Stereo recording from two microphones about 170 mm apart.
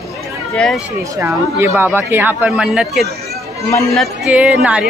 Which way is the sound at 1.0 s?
15° right (ahead or behind).